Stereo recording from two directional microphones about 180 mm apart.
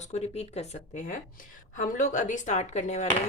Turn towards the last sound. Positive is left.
turn(degrees=40)  # may be behind; listen again after turning